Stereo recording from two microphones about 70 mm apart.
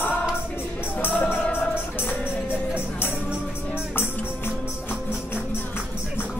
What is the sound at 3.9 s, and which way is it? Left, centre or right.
Music, left.